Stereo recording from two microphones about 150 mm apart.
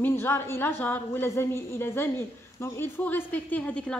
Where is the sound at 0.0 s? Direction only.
15° left (ahead or behind).